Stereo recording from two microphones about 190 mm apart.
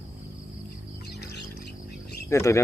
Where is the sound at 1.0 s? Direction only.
60° left (ahead or behind).